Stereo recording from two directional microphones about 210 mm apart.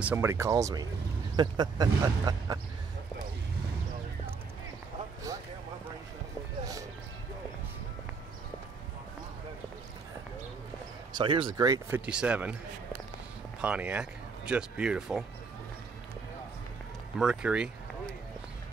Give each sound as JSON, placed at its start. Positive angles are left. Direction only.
{"t": 0.0, "sound": "speech", "side_deg": -10}
{"t": 11.1, "sound": "speech", "side_deg": -20}
{"t": 12.1, "sound": "a man's voice", "side_deg": -5}
{"t": 13.6, "sound": "speech", "side_deg": -5}
{"t": 17.2, "sound": "a man's voice", "side_deg": -5}